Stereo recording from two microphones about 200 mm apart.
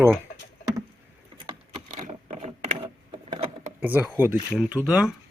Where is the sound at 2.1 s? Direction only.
35° right (ahead or behind).